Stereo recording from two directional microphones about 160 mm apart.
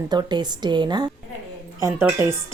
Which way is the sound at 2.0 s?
10° right (ahead or behind).